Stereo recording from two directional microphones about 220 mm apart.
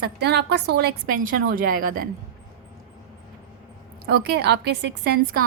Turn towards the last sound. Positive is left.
turn(degrees=-45)  # may be behind; listen again after turning